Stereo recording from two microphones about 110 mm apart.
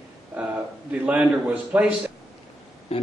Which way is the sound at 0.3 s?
15° right (ahead or behind).